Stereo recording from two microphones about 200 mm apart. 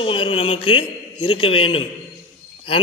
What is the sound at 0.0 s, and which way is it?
A man's voice, 25° left (ahead or behind).